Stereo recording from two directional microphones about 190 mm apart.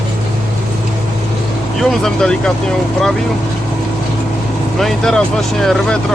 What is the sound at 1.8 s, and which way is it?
Speech, 5° left (ahead or behind).